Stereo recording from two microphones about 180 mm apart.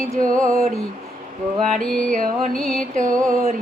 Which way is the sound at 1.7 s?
5° left (ahead or behind).